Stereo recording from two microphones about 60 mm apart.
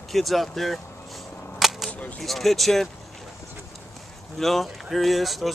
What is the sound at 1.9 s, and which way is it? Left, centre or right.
Cap gun, left.